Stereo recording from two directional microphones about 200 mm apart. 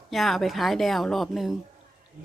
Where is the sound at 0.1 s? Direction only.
Centre (ahead or behind).